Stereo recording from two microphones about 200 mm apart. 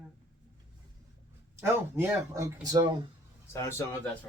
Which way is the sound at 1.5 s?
15° right (ahead or behind).